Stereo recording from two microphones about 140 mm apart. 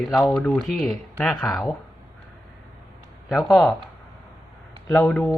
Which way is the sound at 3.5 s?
Centre (ahead or behind).